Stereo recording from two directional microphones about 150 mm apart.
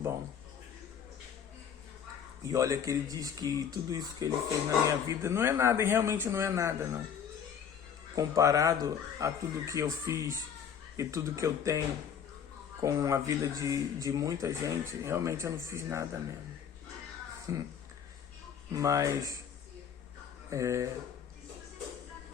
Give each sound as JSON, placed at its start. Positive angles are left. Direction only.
{"t": 2.4, "sound": "a man's voice", "side_deg": -20}
{"t": 8.1, "sound": "speech", "side_deg": -25}
{"t": 12.8, "sound": "speech", "side_deg": -20}
{"t": 17.5, "sound": "speech", "side_deg": -20}
{"t": 18.7, "sound": "speech", "side_deg": -20}
{"t": 20.5, "sound": "speech", "side_deg": -20}